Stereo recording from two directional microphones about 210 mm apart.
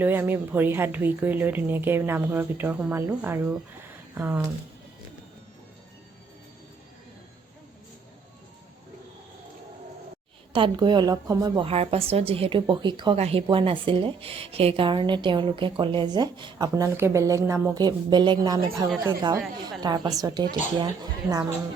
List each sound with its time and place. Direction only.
0.0 s a woman's voice: 10° right (ahead or behind)
10.5 s a woman's voice: 20° right (ahead or behind)